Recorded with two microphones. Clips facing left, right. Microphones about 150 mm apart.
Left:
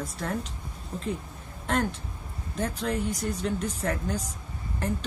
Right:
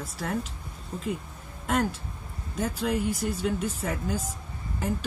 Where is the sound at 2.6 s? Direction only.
5° right (ahead or behind).